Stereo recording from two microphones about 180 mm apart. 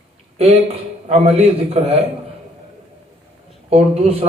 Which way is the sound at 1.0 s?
35° right (ahead or behind).